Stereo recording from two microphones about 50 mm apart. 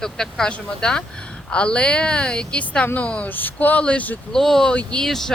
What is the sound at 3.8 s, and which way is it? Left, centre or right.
Speech, left.